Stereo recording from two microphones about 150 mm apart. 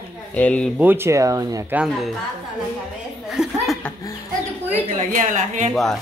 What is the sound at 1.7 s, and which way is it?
Speech, 5° right (ahead or behind).